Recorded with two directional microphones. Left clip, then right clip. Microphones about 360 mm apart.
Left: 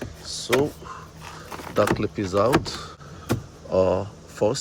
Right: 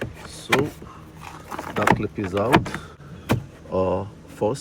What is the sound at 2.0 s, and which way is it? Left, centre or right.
Speech, centre.